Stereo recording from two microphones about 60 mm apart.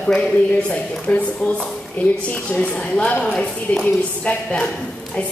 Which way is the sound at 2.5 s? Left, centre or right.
Left.